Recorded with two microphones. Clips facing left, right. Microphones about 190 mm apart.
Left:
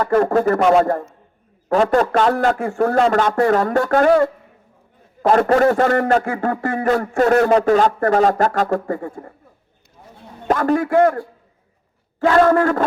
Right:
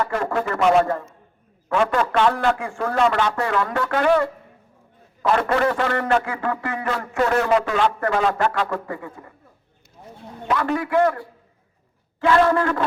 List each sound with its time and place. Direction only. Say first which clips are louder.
0.0 s speech: left 8 dB; 40° left (ahead or behind)
10.5 s speech: left 5 dB; 45° left (ahead or behind)